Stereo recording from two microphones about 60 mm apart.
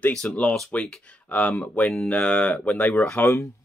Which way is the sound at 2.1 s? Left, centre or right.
Centre.